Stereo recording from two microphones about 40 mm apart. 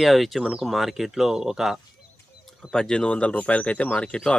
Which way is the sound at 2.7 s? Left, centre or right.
Centre.